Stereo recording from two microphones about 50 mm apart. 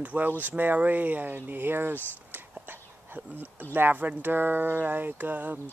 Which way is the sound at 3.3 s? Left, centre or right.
Right.